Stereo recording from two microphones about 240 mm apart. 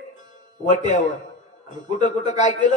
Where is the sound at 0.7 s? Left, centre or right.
Left.